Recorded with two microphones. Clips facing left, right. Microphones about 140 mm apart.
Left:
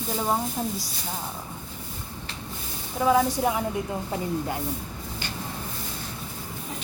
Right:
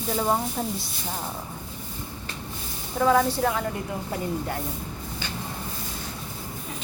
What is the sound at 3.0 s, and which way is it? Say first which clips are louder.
Speech: right 1 dB; 10° left (ahead or behind).